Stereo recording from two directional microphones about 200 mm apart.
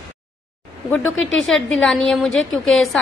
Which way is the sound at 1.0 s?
75° left (ahead or behind).